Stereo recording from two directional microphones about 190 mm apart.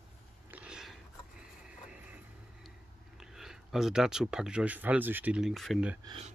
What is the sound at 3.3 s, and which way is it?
Speech, centre (ahead or behind).